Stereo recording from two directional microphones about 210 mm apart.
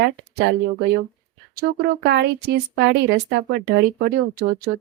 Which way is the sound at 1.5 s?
50° right (ahead or behind).